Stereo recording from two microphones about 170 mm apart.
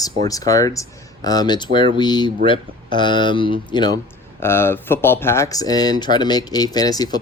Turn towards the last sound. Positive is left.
turn(degrees=20)  # may be behind; listen again after turning